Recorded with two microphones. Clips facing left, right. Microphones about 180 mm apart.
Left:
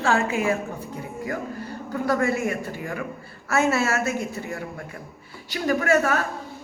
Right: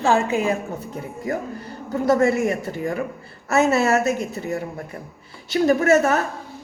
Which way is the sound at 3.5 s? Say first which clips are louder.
Right 4 dB; 20° right (ahead or behind).